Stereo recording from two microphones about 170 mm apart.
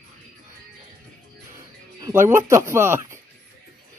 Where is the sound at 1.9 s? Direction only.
20° right (ahead or behind).